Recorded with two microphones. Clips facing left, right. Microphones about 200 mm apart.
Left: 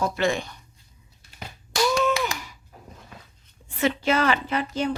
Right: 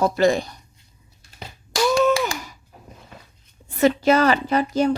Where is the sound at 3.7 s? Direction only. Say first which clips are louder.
Right 6 dB; 40° right (ahead or behind).